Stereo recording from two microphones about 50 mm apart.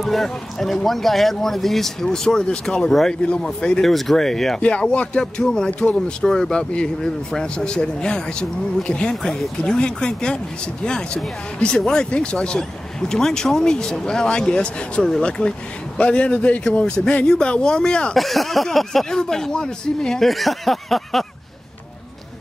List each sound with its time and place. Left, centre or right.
0.0 s speech: centre
3.2 s speech: centre
3.8 s speech: centre
4.6 s speech: left
18.1 s speech: centre
20.2 s speech: centre